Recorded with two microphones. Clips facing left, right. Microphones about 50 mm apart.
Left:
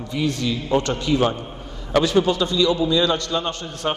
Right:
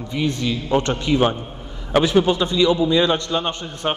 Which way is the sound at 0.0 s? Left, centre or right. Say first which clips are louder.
Right 1 dB; centre.